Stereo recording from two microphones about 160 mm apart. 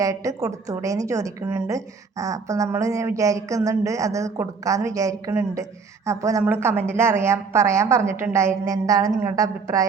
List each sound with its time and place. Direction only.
0.0 s a woman's voice: 20° right (ahead or behind)